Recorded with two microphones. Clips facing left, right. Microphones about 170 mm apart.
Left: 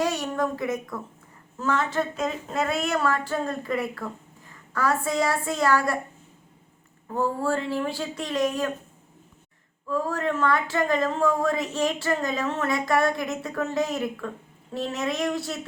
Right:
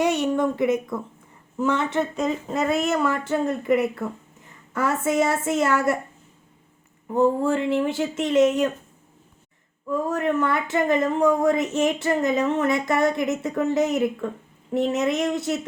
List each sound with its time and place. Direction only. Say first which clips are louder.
0.0 s a woman's voice: right 5 dB; 20° right (ahead or behind)
2.1 s a sound: right 3 dB; centre (ahead or behind)
2.8 s speech: right 2 dB; 20° right (ahead or behind)
7.1 s speech: right 5 dB; 20° right (ahead or behind)
9.9 s speech: right 3 dB; 20° right (ahead or behind)